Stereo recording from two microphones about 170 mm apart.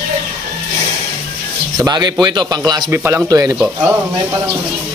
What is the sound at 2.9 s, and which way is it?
Speech, 15° right (ahead or behind).